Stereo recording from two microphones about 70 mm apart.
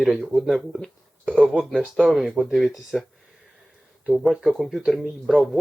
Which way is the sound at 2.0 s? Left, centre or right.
Centre.